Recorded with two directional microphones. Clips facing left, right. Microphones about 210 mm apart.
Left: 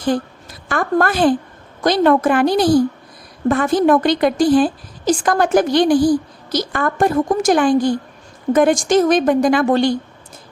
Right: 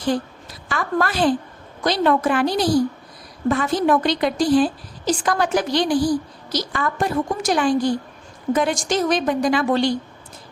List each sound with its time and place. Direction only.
0.7 s a woman's voice: 50° left (ahead or behind)